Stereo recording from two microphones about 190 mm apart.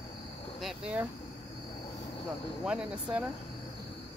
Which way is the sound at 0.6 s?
5° right (ahead or behind).